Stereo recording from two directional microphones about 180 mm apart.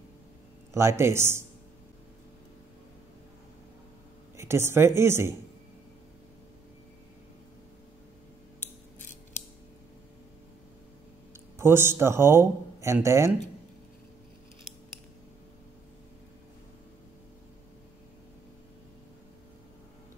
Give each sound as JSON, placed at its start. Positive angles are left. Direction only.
{"t": 0.7, "sound": "a woman's voice", "side_deg": -15}
{"t": 4.4, "sound": "a woman's voice", "side_deg": -15}
{"t": 11.5, "sound": "a man's voice", "side_deg": -15}